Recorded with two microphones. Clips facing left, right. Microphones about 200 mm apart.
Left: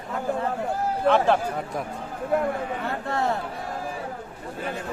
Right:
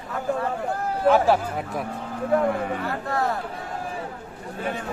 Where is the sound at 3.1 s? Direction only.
25° left (ahead or behind).